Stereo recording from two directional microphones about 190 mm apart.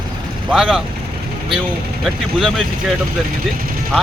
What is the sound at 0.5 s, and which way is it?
Speech, centre (ahead or behind).